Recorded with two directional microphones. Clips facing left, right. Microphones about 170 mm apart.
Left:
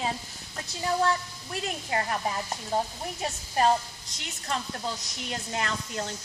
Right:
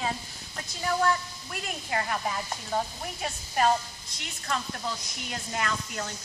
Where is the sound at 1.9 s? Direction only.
25° left (ahead or behind).